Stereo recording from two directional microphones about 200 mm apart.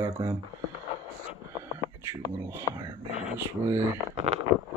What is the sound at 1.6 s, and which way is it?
Whispering, 15° right (ahead or behind).